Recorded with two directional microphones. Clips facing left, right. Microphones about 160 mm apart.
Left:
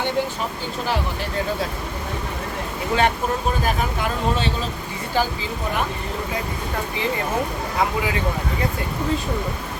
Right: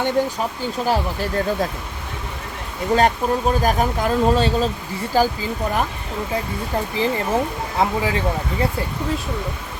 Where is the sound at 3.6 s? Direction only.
40° right (ahead or behind).